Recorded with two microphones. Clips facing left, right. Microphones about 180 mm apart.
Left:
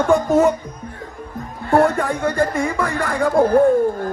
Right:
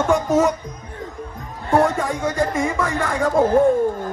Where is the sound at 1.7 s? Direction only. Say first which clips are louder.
Left 2 dB; 15° right (ahead or behind).